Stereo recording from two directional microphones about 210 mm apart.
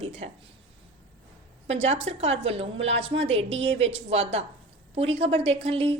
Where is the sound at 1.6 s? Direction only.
30° right (ahead or behind).